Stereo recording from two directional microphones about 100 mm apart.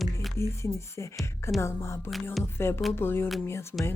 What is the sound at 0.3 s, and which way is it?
Speech, 25° left (ahead or behind).